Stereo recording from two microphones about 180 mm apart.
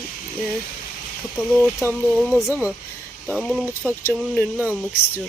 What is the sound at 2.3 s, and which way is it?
Speech, 10° right (ahead or behind).